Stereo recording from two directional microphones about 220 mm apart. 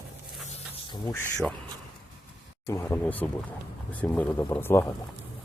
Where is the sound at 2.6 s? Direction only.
10° left (ahead or behind).